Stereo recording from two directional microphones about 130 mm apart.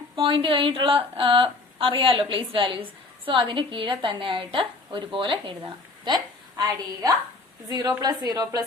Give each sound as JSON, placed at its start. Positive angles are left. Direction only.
{"t": 0.2, "sound": "a woman's voice", "side_deg": -45}